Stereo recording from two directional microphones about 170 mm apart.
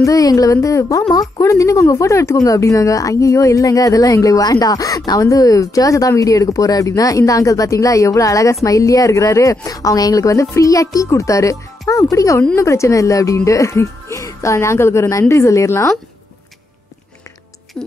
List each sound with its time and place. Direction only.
0.0 s speech: 20° left (ahead or behind)
17.8 s speech: 5° left (ahead or behind)